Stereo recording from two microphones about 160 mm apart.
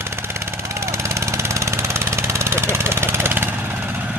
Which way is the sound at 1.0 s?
20° right (ahead or behind).